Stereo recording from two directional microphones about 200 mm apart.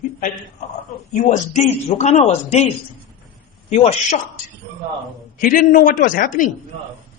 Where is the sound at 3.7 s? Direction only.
30° left (ahead or behind).